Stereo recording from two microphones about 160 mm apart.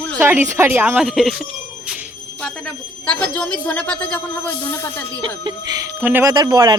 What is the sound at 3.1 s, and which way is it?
A woman's voice, 5° left (ahead or behind).